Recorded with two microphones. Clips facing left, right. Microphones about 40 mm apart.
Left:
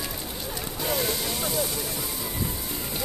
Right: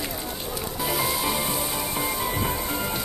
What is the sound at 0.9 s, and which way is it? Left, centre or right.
Music, centre.